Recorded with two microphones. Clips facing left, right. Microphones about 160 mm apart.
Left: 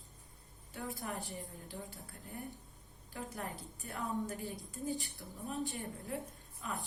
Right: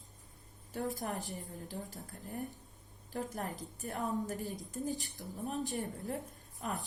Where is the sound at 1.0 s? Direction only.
40° right (ahead or behind).